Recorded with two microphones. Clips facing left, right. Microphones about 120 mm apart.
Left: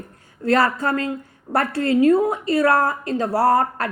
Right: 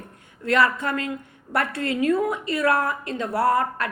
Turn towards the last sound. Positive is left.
turn(degrees=35)  # may be behind; listen again after turning